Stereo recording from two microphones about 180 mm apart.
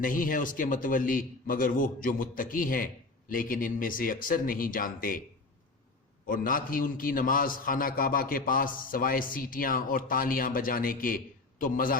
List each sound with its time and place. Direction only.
0.0 s a man's voice: 50° left (ahead or behind)
6.2 s a man's voice: 50° left (ahead or behind)